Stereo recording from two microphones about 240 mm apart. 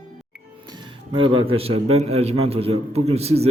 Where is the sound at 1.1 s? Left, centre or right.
Right.